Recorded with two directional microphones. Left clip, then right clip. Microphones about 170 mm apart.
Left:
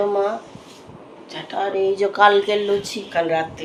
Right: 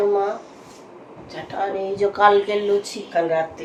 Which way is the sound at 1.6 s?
30° left (ahead or behind).